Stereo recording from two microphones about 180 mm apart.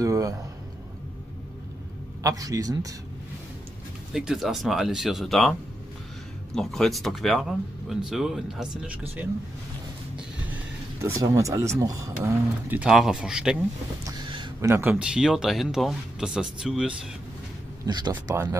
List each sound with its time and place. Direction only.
0.0 s a sound: 20° right (ahead or behind)
2.2 s speech: 20° right (ahead or behind)
4.1 s speech: 5° right (ahead or behind)
11.0 s speech: 20° right (ahead or behind)
14.3 s speech: 20° right (ahead or behind); by 16.9 s 5° right (ahead or behind)
17.8 s speech: 25° right (ahead or behind)